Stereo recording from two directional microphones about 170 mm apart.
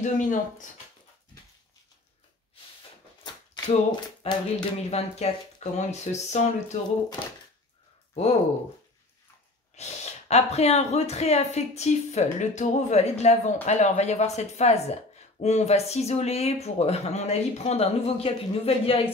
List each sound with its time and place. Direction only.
0.0 s speech: 50° left (ahead or behind)
3.9 s speech: 25° left (ahead or behind)
5.1 s speech: 40° left (ahead or behind)
7.2 s speech: 15° left (ahead or behind)
8.1 s speech: 35° left (ahead or behind)
9.8 s speech: 40° left (ahead or behind)